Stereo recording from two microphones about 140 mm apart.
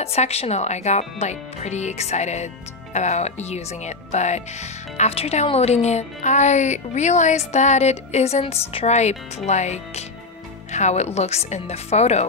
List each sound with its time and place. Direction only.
0.0 s speech: 50° left (ahead or behind)